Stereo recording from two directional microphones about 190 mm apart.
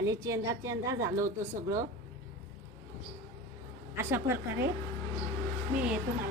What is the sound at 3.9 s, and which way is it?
Speech, 15° right (ahead or behind).